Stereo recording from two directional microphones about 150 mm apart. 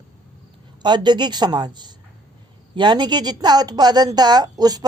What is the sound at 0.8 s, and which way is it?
A woman's voice, 30° right (ahead or behind).